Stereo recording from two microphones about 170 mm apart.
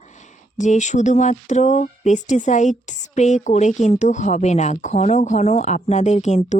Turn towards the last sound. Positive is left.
turn(degrees=40)  # may be behind; listen again after turning